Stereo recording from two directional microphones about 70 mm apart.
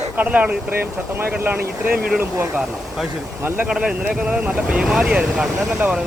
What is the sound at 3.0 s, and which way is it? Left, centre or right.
Speech, centre.